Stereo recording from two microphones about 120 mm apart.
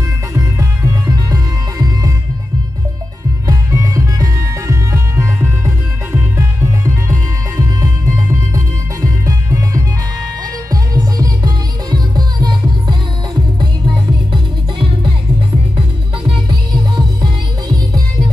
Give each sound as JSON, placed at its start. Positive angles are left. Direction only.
{"t": 0.3, "sound": "music", "side_deg": -25}
{"t": 3.4, "sound": "music", "side_deg": -25}
{"t": 16.3, "sound": "music", "side_deg": -35}